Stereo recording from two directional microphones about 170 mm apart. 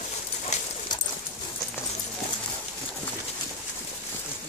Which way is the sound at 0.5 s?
40° left (ahead or behind).